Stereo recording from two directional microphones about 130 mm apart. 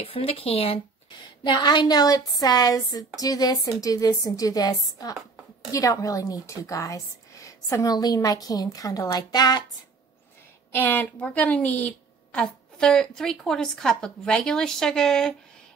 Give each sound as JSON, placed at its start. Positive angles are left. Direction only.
{"t": 0.0, "sound": "speech", "side_deg": 50}
{"t": 1.2, "sound": "a woman's voice", "side_deg": 35}
{"t": 10.7, "sound": "a woman's voice", "side_deg": 15}